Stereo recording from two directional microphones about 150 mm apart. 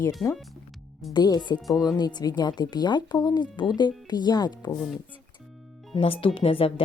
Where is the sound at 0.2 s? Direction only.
5° left (ahead or behind).